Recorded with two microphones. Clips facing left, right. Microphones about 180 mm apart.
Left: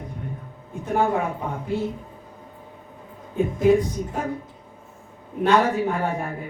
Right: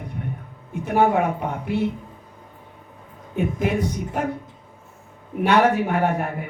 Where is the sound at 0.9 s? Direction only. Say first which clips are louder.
Right 3 dB; 70° right (ahead or behind).